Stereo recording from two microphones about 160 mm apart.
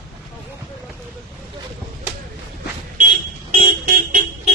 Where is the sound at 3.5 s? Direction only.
60° right (ahead or behind).